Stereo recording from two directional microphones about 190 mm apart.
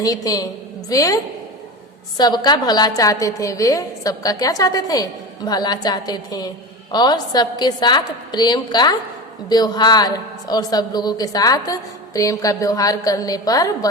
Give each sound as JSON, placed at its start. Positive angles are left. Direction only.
{"t": 0.0, "sound": "a woman's voice", "side_deg": 20}